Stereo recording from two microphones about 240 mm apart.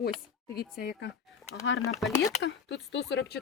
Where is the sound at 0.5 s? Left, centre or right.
Left.